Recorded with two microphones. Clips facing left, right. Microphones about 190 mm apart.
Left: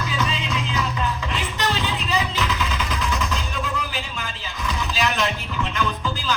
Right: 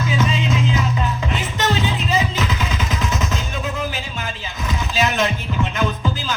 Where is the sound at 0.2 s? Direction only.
45° right (ahead or behind).